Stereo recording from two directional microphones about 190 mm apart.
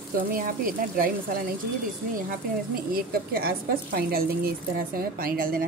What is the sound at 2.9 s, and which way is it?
A woman's voice, 50° right (ahead or behind).